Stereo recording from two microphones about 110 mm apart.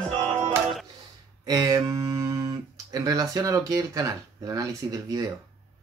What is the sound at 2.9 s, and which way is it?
Speech, 35° right (ahead or behind).